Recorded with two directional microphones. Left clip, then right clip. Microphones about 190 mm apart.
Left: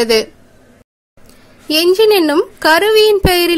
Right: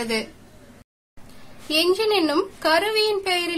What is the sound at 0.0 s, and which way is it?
Speech, 40° left (ahead or behind).